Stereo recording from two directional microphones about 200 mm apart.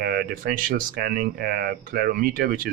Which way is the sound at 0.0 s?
45° right (ahead or behind).